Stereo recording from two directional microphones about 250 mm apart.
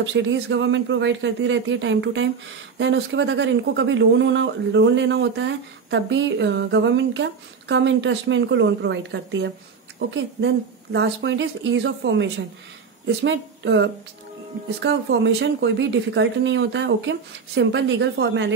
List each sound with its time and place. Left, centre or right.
0.0 s speech: right